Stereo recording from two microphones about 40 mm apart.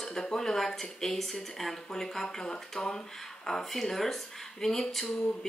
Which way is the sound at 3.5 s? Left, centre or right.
Centre.